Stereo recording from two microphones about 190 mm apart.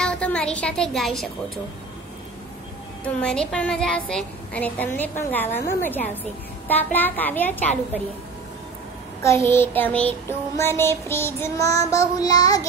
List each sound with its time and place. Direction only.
0.0 s speech: 5° left (ahead or behind)
3.2 s a woman's voice: 5° left (ahead or behind)
9.2 s a woman's voice: 15° left (ahead or behind)
12.2 s child singing: 20° left (ahead or behind)